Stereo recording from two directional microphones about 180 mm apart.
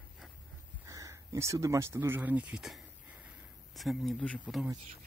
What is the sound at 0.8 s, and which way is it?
Speech, 20° right (ahead or behind).